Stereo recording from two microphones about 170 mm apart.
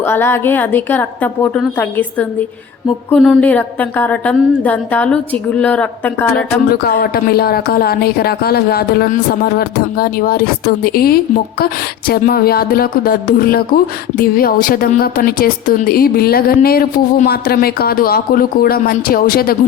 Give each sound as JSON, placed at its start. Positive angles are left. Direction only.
{"t": 0.1, "sound": "a woman's voice", "side_deg": 15}
{"t": 6.7, "sound": "music", "side_deg": 60}